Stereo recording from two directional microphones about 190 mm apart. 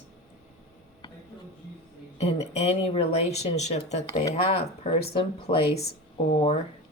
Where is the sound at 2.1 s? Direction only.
35° left (ahead or behind).